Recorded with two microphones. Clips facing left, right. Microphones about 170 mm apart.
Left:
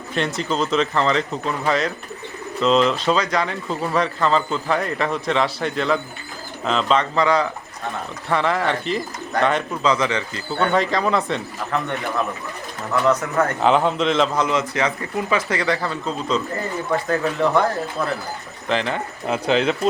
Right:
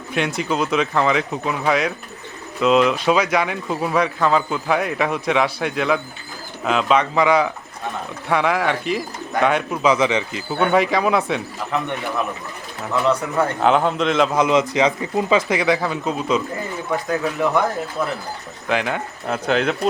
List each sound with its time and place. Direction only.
0.4 s speech: 10° right (ahead or behind)
13.6 s a man's voice: centre (ahead or behind)
14.3 s speech: 15° right (ahead or behind)
18.7 s a man's voice: 10° right (ahead or behind)